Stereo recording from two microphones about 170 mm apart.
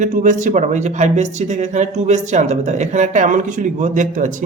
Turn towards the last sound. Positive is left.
turn(degrees=-50)  # may be behind; listen again after turning